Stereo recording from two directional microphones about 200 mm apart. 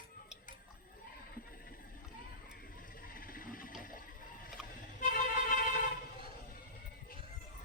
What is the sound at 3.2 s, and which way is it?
Sewing machine, 45° left (ahead or behind).